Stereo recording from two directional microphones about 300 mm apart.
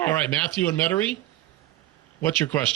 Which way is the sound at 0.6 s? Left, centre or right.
Centre.